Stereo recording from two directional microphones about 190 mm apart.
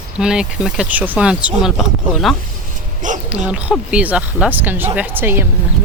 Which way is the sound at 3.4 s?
5° right (ahead or behind).